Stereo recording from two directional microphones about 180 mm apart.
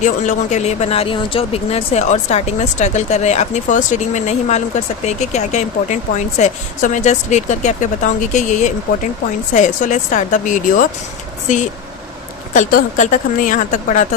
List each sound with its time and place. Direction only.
0.0 s speech: 45° left (ahead or behind)
12.5 s speech: 45° left (ahead or behind)